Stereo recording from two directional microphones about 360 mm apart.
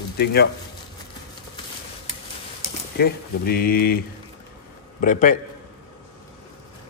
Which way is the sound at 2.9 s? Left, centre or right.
Left.